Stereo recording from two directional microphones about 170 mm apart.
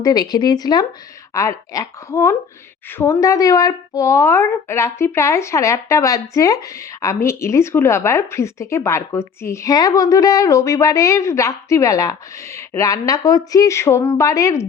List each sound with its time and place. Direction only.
0.0 s a woman's voice: 25° left (ahead or behind)